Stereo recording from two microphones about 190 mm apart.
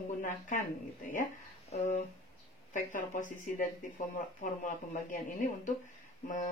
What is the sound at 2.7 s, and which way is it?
A woman's voice, 40° left (ahead or behind).